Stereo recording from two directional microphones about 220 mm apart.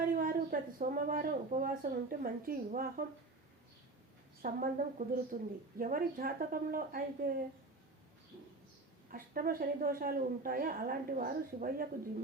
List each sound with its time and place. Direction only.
0.2 s speech: 40° right (ahead or behind)
4.4 s speech: 40° right (ahead or behind)
9.0 s speech: 40° right (ahead or behind)